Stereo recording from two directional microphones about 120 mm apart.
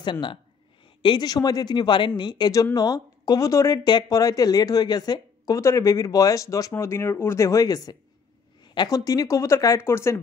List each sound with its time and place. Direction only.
0.0 s speech: 40° left (ahead or behind); by 10.1 s 20° left (ahead or behind)